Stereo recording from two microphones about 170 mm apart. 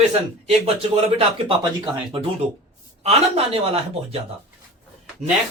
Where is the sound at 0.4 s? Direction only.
40° right (ahead or behind).